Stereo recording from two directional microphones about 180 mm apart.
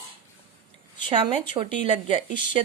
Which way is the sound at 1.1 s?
30° right (ahead or behind).